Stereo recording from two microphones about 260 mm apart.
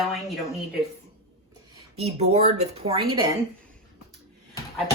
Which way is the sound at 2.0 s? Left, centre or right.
Right.